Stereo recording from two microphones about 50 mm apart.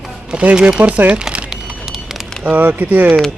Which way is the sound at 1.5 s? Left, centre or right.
Centre.